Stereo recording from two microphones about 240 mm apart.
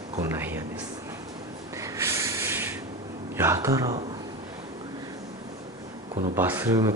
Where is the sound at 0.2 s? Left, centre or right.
Centre.